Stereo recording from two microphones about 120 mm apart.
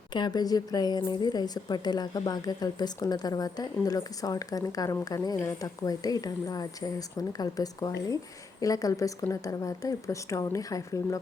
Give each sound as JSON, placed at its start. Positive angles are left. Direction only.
{"t": 0.1, "sound": "a woman's voice", "side_deg": 35}